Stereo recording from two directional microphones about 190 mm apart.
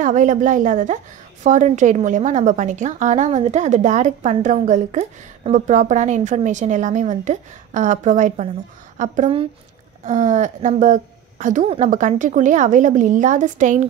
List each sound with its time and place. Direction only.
0.0 s a woman's voice: 40° right (ahead or behind)
11.6 s a woman's voice: 30° right (ahead or behind)
11.9 s a woman's voice: 40° right (ahead or behind)